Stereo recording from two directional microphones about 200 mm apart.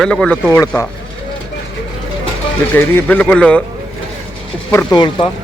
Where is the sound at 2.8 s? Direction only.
10° left (ahead or behind).